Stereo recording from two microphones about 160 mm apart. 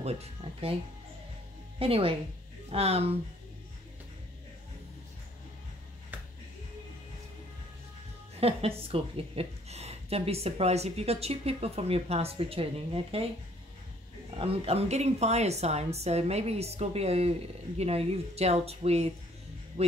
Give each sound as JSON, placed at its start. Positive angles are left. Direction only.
{"t": 0.0, "sound": "speech", "side_deg": -40}
{"t": 1.8, "sound": "a woman's voice", "side_deg": -35}
{"t": 8.4, "sound": "a woman's voice", "side_deg": -40}
{"t": 14.4, "sound": "a woman's voice", "side_deg": -40}